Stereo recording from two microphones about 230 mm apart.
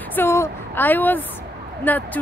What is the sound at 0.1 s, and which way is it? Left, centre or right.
Speech, centre.